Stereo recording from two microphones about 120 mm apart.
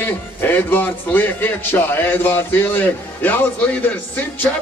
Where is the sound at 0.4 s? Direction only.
15° left (ahead or behind).